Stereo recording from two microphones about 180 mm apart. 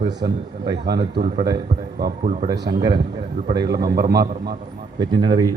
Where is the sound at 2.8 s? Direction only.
25° right (ahead or behind).